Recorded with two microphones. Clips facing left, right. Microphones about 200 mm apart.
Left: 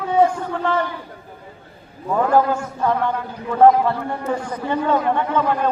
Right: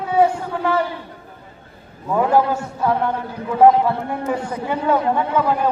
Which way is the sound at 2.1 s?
10° right (ahead or behind).